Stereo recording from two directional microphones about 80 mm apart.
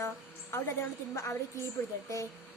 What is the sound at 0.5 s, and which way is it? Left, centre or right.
Speech, left.